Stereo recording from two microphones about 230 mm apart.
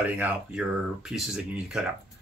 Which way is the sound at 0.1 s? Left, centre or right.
Centre.